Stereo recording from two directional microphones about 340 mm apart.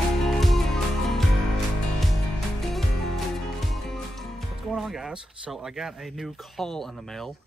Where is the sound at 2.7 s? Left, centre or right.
Centre.